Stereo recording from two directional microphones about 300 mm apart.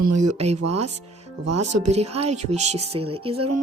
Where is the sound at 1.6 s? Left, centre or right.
Right.